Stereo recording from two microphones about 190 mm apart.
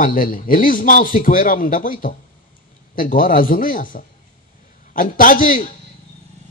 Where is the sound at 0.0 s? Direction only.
45° left (ahead or behind).